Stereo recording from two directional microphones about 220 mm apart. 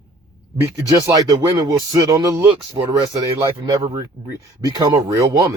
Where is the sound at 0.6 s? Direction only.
15° right (ahead or behind).